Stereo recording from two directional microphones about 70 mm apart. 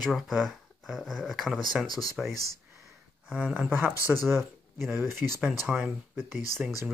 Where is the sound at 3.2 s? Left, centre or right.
Centre.